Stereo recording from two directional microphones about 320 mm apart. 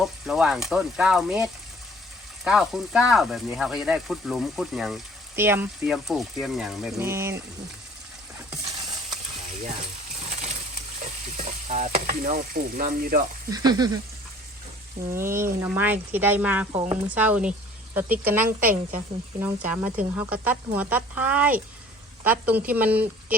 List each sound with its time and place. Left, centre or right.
0.0 s speech: centre
9.5 s speech: right
10.2 s a sound: right
11.0 s stir: right
13.5 s speech: centre
15.1 s speech: centre
16.7 s speech: centre
17.1 s speech: centre